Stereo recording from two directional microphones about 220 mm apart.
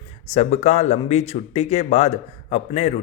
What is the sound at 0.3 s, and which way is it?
Speech, 30° left (ahead or behind).